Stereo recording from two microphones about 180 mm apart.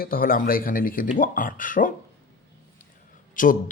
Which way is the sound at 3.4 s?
50° left (ahead or behind).